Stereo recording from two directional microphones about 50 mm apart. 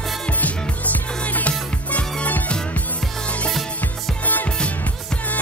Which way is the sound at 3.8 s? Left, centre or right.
Left.